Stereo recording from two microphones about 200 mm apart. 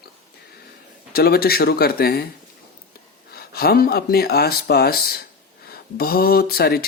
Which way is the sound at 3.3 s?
50° left (ahead or behind).